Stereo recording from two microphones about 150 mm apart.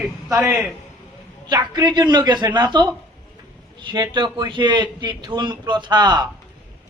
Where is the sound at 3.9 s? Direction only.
30° right (ahead or behind).